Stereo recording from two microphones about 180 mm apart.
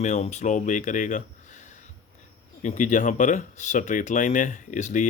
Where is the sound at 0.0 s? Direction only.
40° left (ahead or behind).